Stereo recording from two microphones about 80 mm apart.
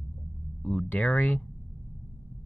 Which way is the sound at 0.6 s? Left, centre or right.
Centre.